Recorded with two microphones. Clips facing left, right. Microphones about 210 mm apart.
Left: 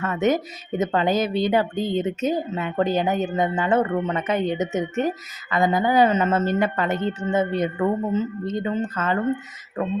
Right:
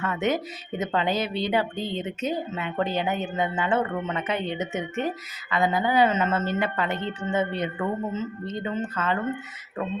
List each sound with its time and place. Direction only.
0.0 s a woman's voice: 45° left (ahead or behind)